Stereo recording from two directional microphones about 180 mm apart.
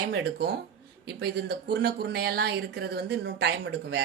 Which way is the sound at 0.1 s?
75° right (ahead or behind).